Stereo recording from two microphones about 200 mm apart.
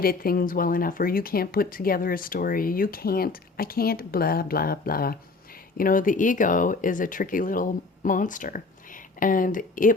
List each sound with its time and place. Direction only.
0.0 s speech: 45° left (ahead or behind)